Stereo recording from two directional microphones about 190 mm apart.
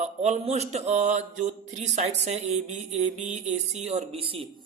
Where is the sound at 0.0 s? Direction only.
35° right (ahead or behind).